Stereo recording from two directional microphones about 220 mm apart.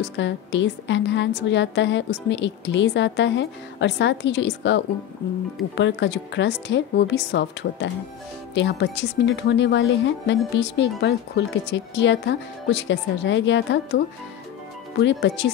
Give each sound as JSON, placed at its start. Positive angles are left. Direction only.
{"t": 0.0, "sound": "a woman's voice", "side_deg": 55}